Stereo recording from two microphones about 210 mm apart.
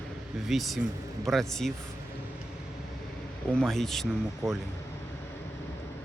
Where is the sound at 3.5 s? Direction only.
Centre (ahead or behind).